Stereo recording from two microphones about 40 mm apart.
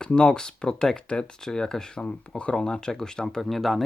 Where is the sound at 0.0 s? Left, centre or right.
Left.